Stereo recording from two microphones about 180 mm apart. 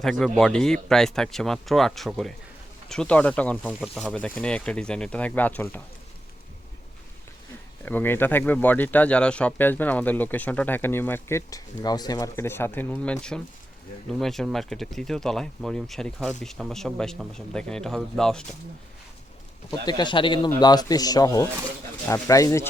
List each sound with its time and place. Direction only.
0.0 s speech: centre (ahead or behind)
7.9 s speech: 10° left (ahead or behind)
19.8 s a man's voice: 25° left (ahead or behind)